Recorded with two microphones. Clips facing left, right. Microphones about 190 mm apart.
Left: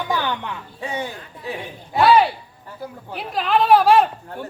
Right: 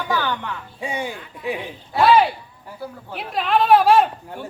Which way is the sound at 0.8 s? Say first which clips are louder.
Right 1 dB; 10° right (ahead or behind).